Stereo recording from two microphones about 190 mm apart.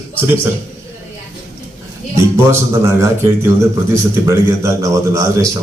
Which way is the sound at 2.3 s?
15° right (ahead or behind).